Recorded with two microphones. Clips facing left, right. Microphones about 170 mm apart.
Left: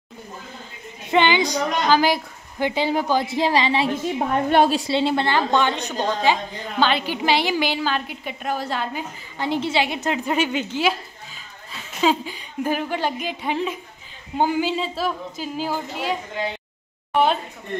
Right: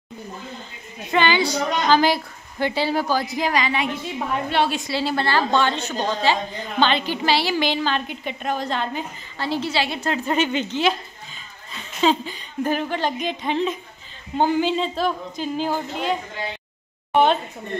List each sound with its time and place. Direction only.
1.1 s a woman's voice: 20° left (ahead or behind)
3.9 s a woman's voice: 45° left (ahead or behind); by 9.5 s 5° left (ahead or behind)
9.5 s a woman's voice: 20° left (ahead or behind); by 16.2 s 5° left (ahead or behind)